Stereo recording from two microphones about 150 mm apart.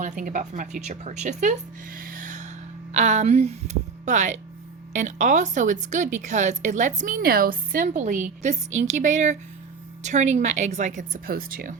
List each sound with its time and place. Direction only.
0.0 s a woman's voice: 60° right (ahead or behind)
2.0 s a sound: 70° right (ahead or behind)
2.9 s a woman's voice: 50° right (ahead or behind); by 11.7 s 75° right (ahead or behind)